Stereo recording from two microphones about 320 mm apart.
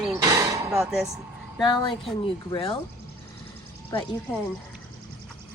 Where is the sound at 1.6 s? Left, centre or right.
Centre.